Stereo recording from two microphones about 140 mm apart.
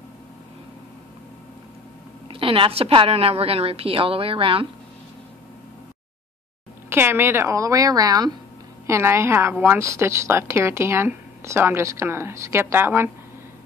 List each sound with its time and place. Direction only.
2.2 s a woman's voice: 40° right (ahead or behind)
6.9 s a woman's voice: 15° right (ahead or behind)